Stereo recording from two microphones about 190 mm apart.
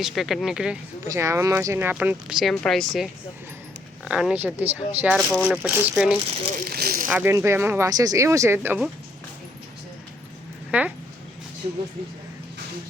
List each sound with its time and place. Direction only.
0.0 s speech: centre (ahead or behind)
1.0 s speech: 15° right (ahead or behind)
5.1 s speech: centre (ahead or behind)
5.6 s speech: 10° right (ahead or behind)
6.7 s a sound: 55° right (ahead or behind)
7.1 s speech: 15° right (ahead or behind)
10.7 s dog: 5° right (ahead or behind)